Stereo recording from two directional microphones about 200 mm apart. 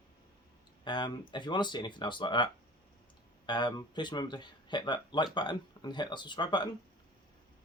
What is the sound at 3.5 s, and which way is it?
Speech, 20° left (ahead or behind).